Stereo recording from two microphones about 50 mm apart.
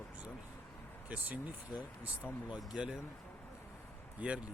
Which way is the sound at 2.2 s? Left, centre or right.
Centre.